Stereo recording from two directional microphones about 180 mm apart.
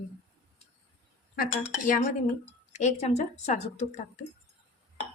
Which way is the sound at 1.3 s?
50° left (ahead or behind).